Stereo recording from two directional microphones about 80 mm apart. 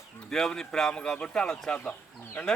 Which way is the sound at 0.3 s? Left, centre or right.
Centre.